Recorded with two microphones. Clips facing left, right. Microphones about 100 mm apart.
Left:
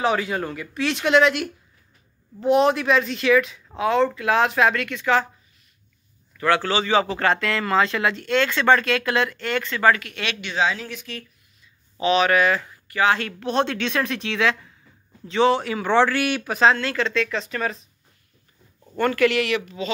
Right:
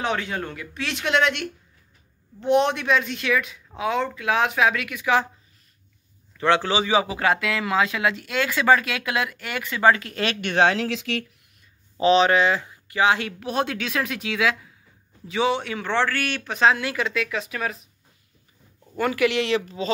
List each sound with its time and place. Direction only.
0.0 s speech: 5° left (ahead or behind); by 5.3 s 15° right (ahead or behind)
6.3 s a man's voice: 20° right (ahead or behind)
9.9 s speech: 35° right (ahead or behind)
10.4 s speech: 60° right (ahead or behind); by 11.2 s 90° right
12.0 s a man's voice: 30° right (ahead or behind); by 16.5 s 10° left (ahead or behind)
16.5 s a man's voice: centre (ahead or behind)
18.9 s a man's voice: 15° right (ahead or behind)
19.4 s speech: 30° right (ahead or behind)